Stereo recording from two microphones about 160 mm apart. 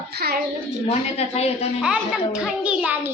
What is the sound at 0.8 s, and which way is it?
Speech, 40° left (ahead or behind).